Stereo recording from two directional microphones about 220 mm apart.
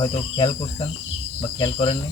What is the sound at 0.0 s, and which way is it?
Cricket, 25° left (ahead or behind).